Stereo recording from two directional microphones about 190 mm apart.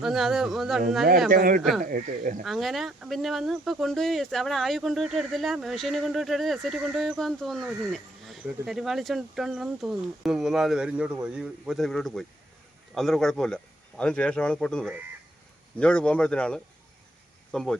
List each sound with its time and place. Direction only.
0.0 s speech: centre (ahead or behind)
1.3 s speech: 50° right (ahead or behind)
2.4 s speech: centre (ahead or behind)